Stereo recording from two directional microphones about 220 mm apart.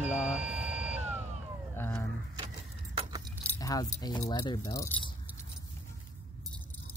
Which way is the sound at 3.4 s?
15° left (ahead or behind).